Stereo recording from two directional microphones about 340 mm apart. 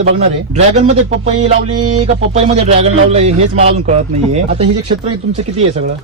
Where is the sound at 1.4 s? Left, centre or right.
Right.